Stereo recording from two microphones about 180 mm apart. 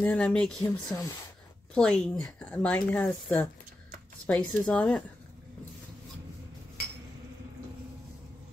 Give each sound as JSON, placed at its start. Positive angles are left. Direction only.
{"t": 0.0, "sound": "a woman's voice", "side_deg": 5}